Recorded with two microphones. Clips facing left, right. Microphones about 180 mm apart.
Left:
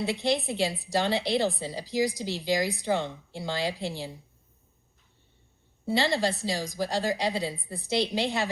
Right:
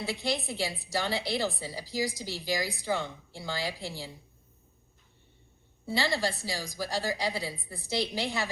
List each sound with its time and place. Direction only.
0.0 s a woman's voice: 20° left (ahead or behind)
5.8 s a woman's voice: 20° left (ahead or behind)